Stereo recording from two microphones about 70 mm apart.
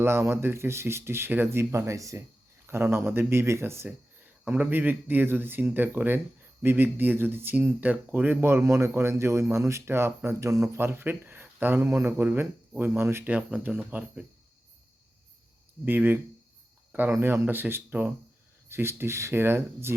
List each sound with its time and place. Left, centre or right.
0.0 s speech: right
2.6 s speech: right
3.8 s speech: right
8.6 s speech: right
10.4 s speech: right
10.8 s speech: right
13.2 s speech: right
15.8 s speech: right